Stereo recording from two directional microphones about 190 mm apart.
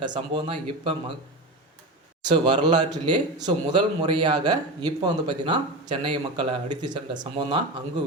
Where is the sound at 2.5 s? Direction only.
25° right (ahead or behind).